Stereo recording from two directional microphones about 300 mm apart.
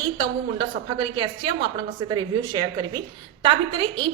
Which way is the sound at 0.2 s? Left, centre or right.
Centre.